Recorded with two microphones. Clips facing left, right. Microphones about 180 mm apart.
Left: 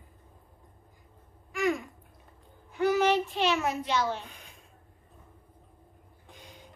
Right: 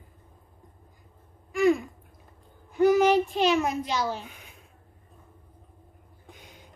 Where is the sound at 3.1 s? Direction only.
40° right (ahead or behind).